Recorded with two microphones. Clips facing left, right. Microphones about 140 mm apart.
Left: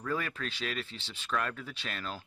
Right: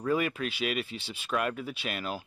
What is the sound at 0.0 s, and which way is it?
Speech, 15° right (ahead or behind).